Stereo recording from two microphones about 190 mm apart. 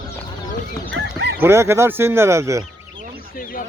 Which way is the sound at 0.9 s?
65° right (ahead or behind).